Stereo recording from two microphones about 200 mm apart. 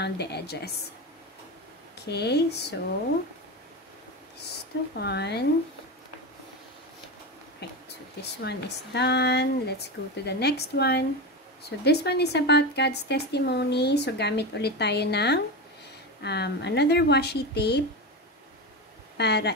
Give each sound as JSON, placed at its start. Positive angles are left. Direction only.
{"t": 0.0, "sound": "speech", "side_deg": 55}
{"t": 2.0, "sound": "speech", "side_deg": 55}
{"t": 4.9, "sound": "speech", "side_deg": 55}
{"t": 7.6, "sound": "speech", "side_deg": 55}
{"t": 19.1, "sound": "speech", "side_deg": 55}